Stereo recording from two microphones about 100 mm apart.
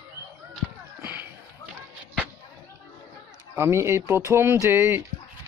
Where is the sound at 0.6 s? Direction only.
5° right (ahead or behind).